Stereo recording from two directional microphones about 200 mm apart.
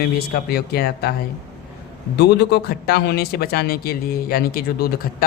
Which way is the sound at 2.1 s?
55° left (ahead or behind).